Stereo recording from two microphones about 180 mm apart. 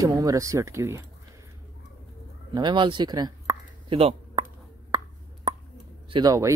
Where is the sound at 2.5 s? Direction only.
25° right (ahead or behind).